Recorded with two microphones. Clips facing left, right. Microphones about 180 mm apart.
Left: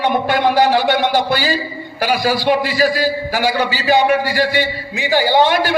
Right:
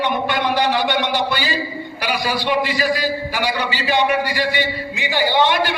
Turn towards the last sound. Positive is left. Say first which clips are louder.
# left 4 dB
turn(degrees=45)  # may be behind; listen again after turning